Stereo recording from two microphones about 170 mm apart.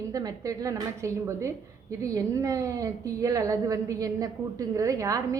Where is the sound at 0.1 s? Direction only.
20° right (ahead or behind).